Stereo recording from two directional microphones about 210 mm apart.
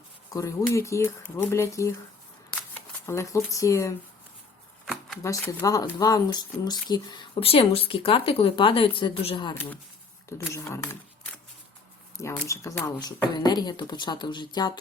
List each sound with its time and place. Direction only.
0.3 s speech: 15° left (ahead or behind)
3.1 s speech: 15° left (ahead or behind)
4.9 s a sound: centre (ahead or behind)
5.2 s speech: 15° left (ahead or behind)
12.1 s speech: 15° left (ahead or behind)